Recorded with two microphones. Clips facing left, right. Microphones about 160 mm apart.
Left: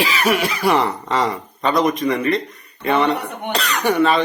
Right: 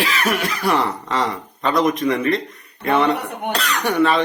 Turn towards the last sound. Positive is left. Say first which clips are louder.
# left 1 dB
turn(degrees=0)  # may be behind; listen again after turning